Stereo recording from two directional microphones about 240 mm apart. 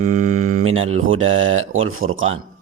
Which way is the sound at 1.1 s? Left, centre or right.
Right.